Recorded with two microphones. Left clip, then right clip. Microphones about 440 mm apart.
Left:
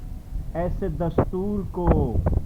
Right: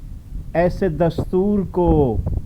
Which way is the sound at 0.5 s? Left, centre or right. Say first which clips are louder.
Right 10 dB; centre.